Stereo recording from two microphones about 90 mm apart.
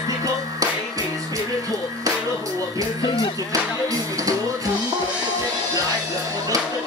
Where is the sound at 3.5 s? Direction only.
40° right (ahead or behind).